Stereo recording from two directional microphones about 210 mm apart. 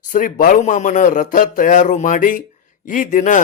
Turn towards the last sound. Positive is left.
turn(degrees=40)  # may be behind; listen again after turning